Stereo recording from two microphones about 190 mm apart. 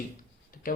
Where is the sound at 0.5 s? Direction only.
45° left (ahead or behind).